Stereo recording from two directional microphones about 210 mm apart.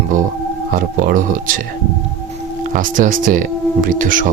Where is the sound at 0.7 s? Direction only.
40° right (ahead or behind).